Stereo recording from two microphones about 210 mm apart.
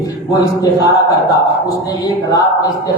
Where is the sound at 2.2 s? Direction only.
15° left (ahead or behind).